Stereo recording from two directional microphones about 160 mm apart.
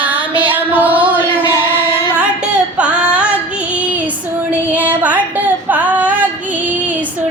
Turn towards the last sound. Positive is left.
turn(degrees=-10)  # may be behind; listen again after turning